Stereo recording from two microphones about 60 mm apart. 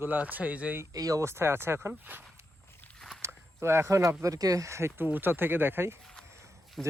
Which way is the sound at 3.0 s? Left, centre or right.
Centre.